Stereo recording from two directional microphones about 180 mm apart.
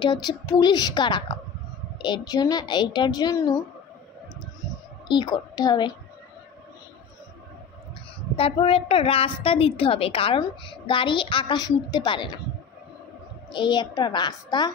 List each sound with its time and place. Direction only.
0.0 s a woman's voice: 25° left (ahead or behind)
5.0 s a woman's voice: 25° left (ahead or behind)
8.4 s a woman's voice: 30° left (ahead or behind)
13.5 s a woman's voice: 25° left (ahead or behind)